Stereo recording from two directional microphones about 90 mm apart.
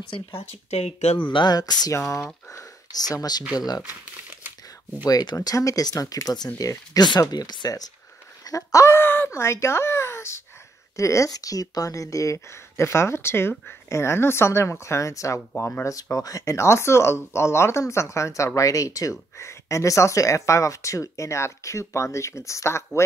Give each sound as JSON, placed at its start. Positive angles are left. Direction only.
{"t": 1.1, "sound": "speech", "side_deg": 65}
{"t": 2.0, "sound": "speech", "side_deg": 30}
{"t": 3.1, "sound": "speech", "side_deg": 45}
{"t": 3.8, "sound": "crumpling", "side_deg": -20}
{"t": 5.0, "sound": "speech", "side_deg": 45}
{"t": 8.5, "sound": "speech", "side_deg": 35}